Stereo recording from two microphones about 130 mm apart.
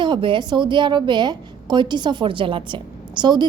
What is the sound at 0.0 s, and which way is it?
A woman's voice, 40° right (ahead or behind).